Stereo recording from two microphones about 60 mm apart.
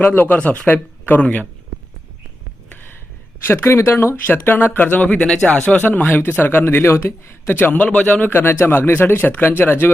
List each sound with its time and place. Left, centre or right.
0.0 s speech: left
3.4 s speech: left
5.2 s speech: centre
5.8 s speech: left
7.8 s speech: left
8.3 s speech: left